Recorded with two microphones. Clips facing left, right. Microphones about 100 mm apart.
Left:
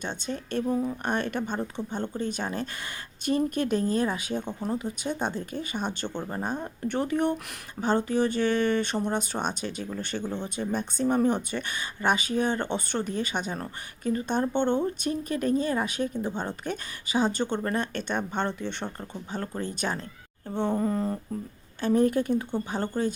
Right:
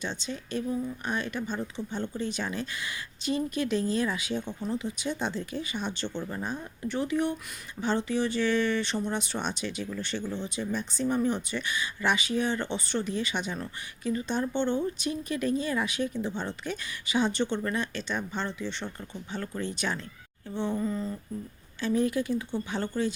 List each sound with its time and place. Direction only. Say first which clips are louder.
0.0 s speech: left 2 dB; 50° left (ahead or behind)
21.8 s speech: left 4 dB; 50° left (ahead or behind)